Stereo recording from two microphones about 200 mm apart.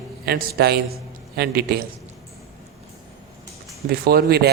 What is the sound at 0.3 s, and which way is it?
Speech, 50° right (ahead or behind).